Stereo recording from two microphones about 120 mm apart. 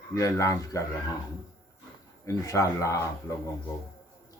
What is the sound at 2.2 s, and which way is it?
Speech, 25° left (ahead or behind).